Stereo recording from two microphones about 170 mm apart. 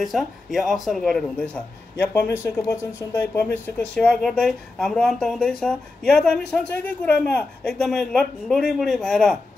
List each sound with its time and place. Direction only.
0.0 s speech: centre (ahead or behind)
2.4 s speech: 15° left (ahead or behind)